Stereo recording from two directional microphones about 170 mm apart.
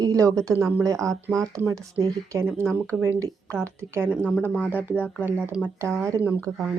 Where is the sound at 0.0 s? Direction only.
20° right (ahead or behind).